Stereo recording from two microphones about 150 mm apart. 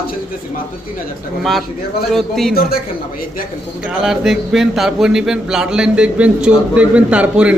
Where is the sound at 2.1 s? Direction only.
Centre (ahead or behind).